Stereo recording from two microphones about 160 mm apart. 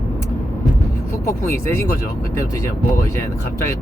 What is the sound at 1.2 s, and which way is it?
Speech, 15° left (ahead or behind).